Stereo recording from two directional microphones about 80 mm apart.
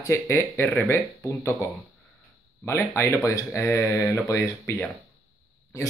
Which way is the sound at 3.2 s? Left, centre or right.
Left.